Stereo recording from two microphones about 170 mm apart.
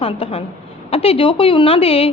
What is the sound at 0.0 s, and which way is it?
A woman's voice, 35° left (ahead or behind).